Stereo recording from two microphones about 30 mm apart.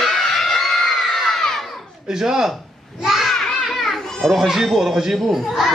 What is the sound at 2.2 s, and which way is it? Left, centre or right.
Speech, right.